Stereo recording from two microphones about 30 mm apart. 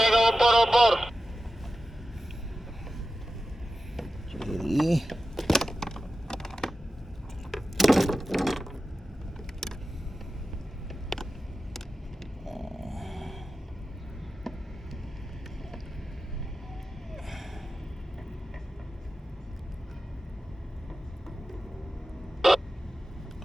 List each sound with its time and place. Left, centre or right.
0.0 s radio: centre
3.9 s vehicle: centre
5.5 s a sound: centre
9.6 s vehicle: centre
11.1 s vehicle: centre
12.5 s a sound: centre
14.5 s a sound: centre
17.2 s gasp: centre
22.4 s vehicle: centre